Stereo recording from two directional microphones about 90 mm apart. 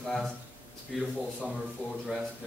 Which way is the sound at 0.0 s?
5° left (ahead or behind).